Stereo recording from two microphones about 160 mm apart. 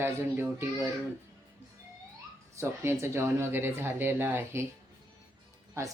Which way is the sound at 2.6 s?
15° right (ahead or behind).